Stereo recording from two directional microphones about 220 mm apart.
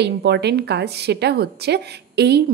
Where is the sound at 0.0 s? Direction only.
50° right (ahead or behind).